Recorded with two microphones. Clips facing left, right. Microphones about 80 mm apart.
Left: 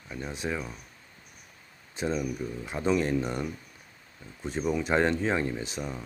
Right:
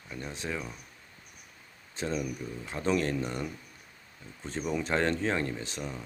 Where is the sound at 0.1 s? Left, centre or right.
Centre.